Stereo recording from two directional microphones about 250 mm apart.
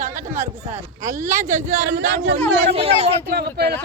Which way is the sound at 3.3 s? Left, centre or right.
Right.